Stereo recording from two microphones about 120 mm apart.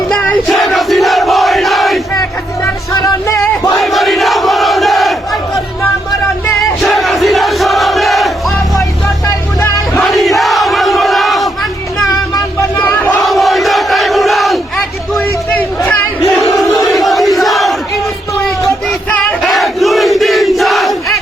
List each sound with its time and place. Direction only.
0.1 s crowd: 5° left (ahead or behind)
2.9 s music: 30° left (ahead or behind)
3.8 s crowd: centre (ahead or behind)
6.6 s crowd: centre (ahead or behind)
9.2 s music: 25° left (ahead or behind)
10.0 s crowd: centre (ahead or behind)
12.7 s battle cry: 15° left (ahead or behind)
13.2 s crowd: centre (ahead or behind)
16.8 s crowd: centre (ahead or behind)
19.4 s crowd: centre (ahead or behind)